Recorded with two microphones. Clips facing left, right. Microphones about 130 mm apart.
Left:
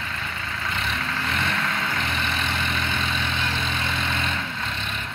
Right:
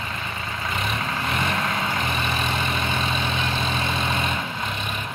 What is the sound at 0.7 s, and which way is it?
Vehicle, 15° right (ahead or behind).